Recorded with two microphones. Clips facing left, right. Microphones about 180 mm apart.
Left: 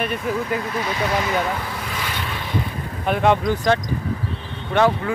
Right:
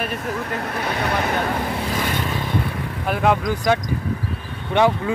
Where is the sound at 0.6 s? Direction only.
60° right (ahead or behind).